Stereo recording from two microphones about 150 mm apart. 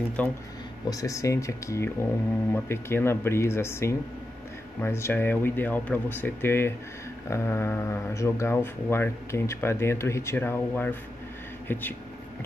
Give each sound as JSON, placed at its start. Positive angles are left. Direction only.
{"t": 0.2, "sound": "speech", "side_deg": 10}
{"t": 0.8, "sound": "speech", "side_deg": 25}